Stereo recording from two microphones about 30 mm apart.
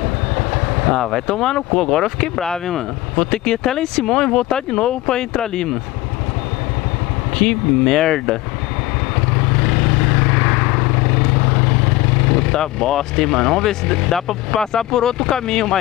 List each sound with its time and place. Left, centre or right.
1.2 s speech: centre
7.3 s speech: centre
9.3 s vehicle: centre